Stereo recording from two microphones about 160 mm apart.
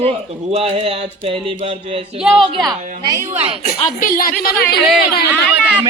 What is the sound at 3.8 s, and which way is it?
Speech, 60° left (ahead or behind).